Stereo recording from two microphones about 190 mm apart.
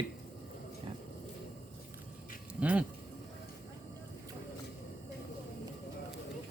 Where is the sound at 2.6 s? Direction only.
5° right (ahead or behind).